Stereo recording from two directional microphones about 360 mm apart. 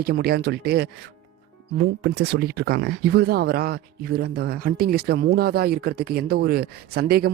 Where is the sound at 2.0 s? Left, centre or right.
Right.